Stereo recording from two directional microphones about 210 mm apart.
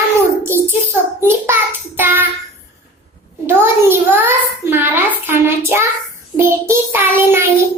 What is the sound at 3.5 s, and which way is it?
A child's voice, 10° right (ahead or behind).